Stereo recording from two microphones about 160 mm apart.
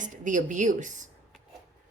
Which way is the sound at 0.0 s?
50° right (ahead or behind).